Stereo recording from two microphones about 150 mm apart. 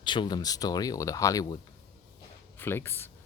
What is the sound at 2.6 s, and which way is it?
Speech, 15° left (ahead or behind).